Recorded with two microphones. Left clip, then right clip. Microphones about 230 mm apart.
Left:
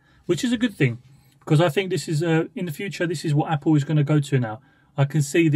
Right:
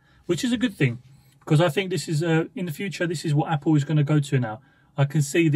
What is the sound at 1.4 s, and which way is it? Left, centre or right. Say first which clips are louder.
Speech: left 1 dB; left.